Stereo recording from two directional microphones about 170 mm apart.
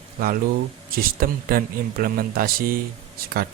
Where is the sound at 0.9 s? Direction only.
60° right (ahead or behind).